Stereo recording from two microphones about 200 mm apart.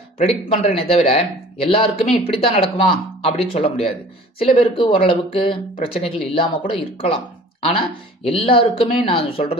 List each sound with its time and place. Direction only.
0.2 s speech: 30° left (ahead or behind)
8.2 s speech: 30° left (ahead or behind)